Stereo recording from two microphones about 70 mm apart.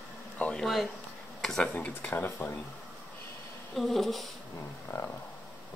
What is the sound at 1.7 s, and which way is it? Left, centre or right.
Speech, left.